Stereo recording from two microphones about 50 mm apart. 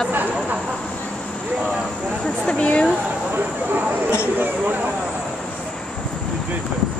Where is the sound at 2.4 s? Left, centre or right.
Left.